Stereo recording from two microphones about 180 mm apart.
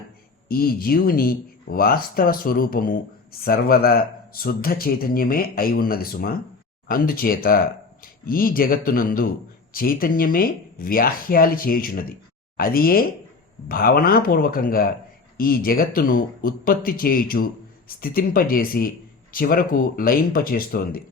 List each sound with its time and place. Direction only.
0.4 s speech: 55° left (ahead or behind)